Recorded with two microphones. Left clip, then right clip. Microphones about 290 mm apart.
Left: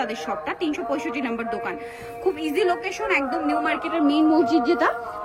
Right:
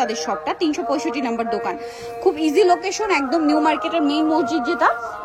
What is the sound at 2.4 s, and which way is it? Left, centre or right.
A woman's voice, centre.